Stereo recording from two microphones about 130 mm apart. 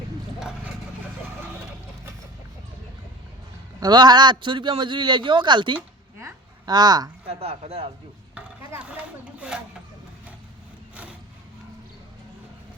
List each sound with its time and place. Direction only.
0.3 s vehicle: 5° right (ahead or behind)
3.8 s a man's voice: 35° right (ahead or behind)
7.3 s speech: 50° right (ahead or behind)
8.4 s speech: 10° right (ahead or behind)